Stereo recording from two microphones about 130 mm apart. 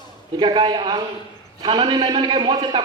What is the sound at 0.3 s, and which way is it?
A man's voice, 35° right (ahead or behind).